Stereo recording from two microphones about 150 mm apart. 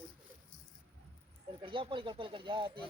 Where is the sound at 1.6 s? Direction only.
35° right (ahead or behind).